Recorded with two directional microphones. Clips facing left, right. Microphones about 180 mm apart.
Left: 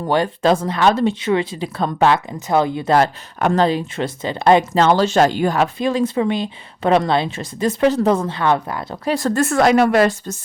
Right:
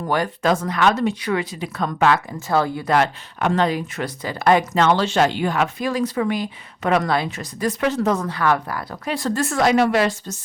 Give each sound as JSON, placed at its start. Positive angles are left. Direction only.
{"t": 0.0, "sound": "speech", "side_deg": 25}
{"t": 2.9, "sound": "speech", "side_deg": 40}
{"t": 3.7, "sound": "speech", "side_deg": 25}
{"t": 9.0, "sound": "a woman's voice", "side_deg": 45}